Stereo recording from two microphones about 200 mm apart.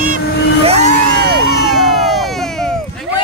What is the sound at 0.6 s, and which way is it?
Music, 30° right (ahead or behind).